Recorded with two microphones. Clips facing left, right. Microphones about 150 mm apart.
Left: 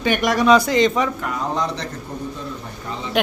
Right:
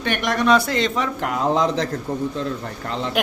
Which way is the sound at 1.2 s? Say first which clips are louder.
Right 4 dB; 90° right.